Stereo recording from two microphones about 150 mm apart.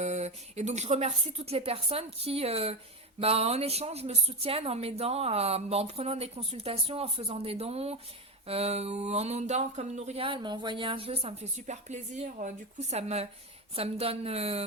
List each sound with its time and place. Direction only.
0.0 s speech: 50° right (ahead or behind)